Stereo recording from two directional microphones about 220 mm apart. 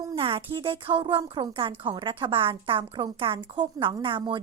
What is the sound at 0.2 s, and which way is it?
A woman's voice, 25° right (ahead or behind).